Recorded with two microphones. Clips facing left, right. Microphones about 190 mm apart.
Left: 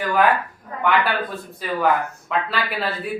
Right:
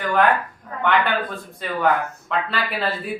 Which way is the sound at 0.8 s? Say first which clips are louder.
Even; 5° left (ahead or behind).